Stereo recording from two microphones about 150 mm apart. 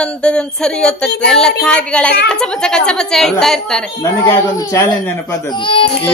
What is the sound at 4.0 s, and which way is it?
Speech, 20° left (ahead or behind).